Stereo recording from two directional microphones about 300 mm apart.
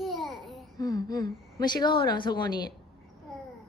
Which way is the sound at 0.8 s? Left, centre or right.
Centre.